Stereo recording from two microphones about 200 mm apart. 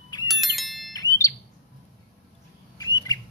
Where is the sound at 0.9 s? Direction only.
15° left (ahead or behind).